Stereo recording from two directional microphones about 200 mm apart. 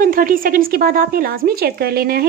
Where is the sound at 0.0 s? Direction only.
45° right (ahead or behind).